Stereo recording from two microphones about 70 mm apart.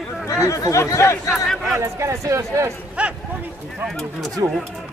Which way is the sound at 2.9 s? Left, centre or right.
Right.